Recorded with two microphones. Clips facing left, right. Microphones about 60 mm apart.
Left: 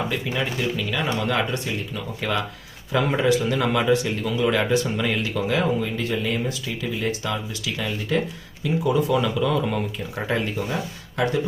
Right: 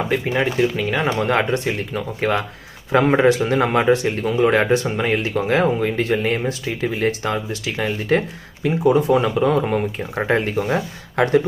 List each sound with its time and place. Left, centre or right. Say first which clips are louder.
0.1 s speech: right 6 dB; right